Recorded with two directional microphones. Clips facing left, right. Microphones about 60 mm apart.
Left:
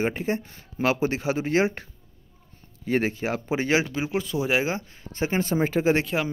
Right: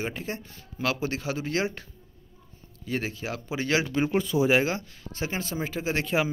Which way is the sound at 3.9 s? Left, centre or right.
Centre.